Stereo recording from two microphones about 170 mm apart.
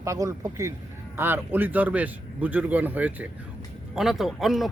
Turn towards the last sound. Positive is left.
turn(degrees=0)  # may be behind; listen again after turning